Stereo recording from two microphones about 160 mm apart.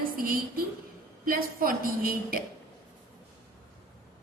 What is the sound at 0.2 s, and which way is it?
A woman's voice, 65° right (ahead or behind).